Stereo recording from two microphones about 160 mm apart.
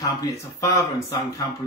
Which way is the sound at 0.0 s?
20° left (ahead or behind).